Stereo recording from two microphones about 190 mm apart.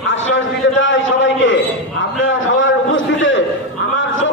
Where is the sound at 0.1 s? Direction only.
85° left.